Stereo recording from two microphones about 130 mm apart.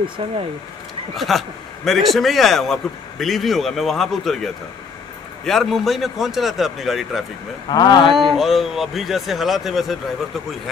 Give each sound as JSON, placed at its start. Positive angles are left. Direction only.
{"t": 0.0, "sound": "speech", "side_deg": -45}
{"t": 1.1, "sound": "a man's voice", "side_deg": 0}
{"t": 7.7, "sound": "speech", "side_deg": 30}
{"t": 8.1, "sound": "a man's voice", "side_deg": 0}